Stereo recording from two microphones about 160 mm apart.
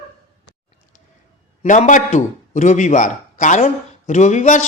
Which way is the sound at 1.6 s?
50° left (ahead or behind).